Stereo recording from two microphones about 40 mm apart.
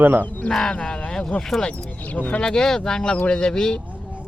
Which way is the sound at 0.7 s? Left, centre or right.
Centre.